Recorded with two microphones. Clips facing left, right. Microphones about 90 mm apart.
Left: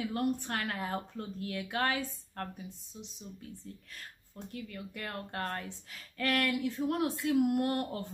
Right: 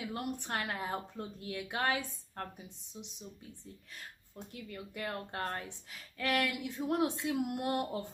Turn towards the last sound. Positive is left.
turn(degrees=-15)  # may be behind; listen again after turning